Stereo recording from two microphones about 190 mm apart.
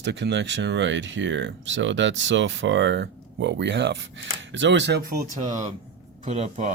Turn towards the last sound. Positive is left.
turn(degrees=-35)  # may be behind; listen again after turning